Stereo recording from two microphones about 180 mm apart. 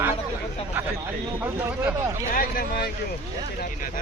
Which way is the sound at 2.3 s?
55° left (ahead or behind).